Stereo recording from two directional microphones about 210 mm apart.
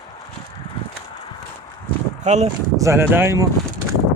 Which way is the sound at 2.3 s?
35° right (ahead or behind).